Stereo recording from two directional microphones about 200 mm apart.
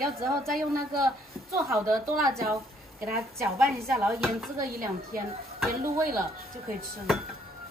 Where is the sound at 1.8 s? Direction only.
20° right (ahead or behind).